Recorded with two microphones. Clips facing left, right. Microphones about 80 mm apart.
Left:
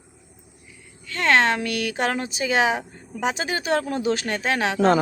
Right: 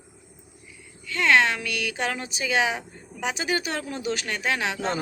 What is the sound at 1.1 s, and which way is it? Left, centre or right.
Speech, left.